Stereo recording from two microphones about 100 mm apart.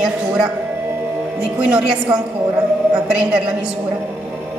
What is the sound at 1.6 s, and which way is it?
A woman's voice, 10° right (ahead or behind).